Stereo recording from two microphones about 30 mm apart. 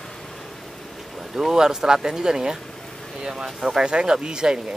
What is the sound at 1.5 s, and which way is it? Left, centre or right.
Speech, centre.